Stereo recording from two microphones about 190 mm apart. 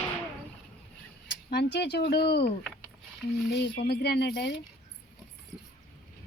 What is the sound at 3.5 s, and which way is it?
Speech, 65° left (ahead or behind).